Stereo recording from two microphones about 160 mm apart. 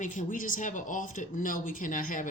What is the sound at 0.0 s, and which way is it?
Speech, 55° left (ahead or behind).